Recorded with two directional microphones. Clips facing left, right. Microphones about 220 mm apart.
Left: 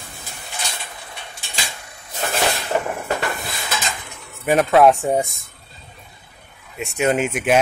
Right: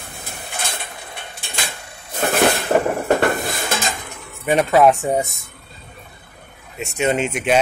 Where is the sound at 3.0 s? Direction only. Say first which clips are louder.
Right 7 dB; 45° right (ahead or behind).